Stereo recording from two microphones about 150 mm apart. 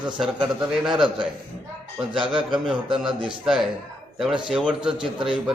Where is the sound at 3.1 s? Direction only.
30° right (ahead or behind).